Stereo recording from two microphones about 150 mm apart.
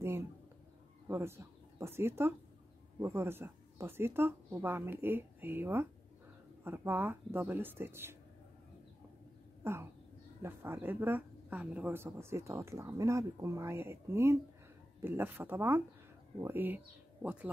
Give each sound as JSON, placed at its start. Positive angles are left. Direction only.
{"t": 1.0, "sound": "speech", "side_deg": -15}
{"t": 9.6, "sound": "a sound", "side_deg": -15}
{"t": 10.4, "sound": "speech", "side_deg": -15}